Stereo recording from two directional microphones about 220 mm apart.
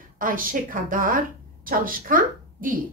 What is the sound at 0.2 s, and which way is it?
A woman's voice, 40° right (ahead or behind).